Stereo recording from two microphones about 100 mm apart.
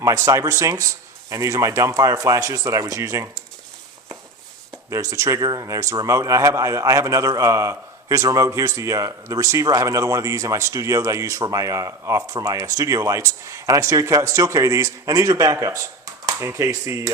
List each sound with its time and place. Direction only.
0.0 s a man's voice: 35° right (ahead or behind)
4.9 s a man's voice: 30° right (ahead or behind)